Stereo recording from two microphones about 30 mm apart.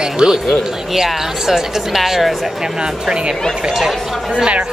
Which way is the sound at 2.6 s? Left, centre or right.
Right.